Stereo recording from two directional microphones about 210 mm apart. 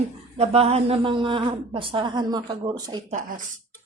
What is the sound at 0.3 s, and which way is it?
A woman's voice, 30° right (ahead or behind).